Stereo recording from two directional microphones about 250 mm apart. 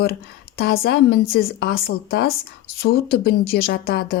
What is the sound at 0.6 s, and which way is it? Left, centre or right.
Speech, left.